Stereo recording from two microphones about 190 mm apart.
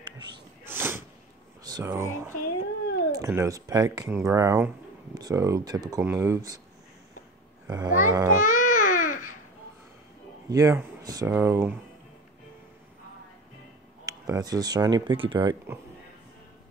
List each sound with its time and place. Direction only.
0.7 s sneeze: 10° right (ahead or behind)
1.6 s speech: 20° right (ahead or behind)
7.7 s speech: 20° right (ahead or behind)
8.5 s baby cry: 45° left (ahead or behind)
10.5 s speech: 15° right (ahead or behind)
14.0 s speech: 20° right (ahead or behind)